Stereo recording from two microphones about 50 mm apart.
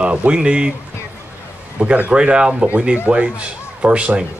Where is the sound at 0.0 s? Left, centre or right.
Right.